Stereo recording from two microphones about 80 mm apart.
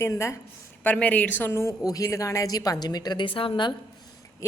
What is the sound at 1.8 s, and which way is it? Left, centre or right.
A woman's voice, left.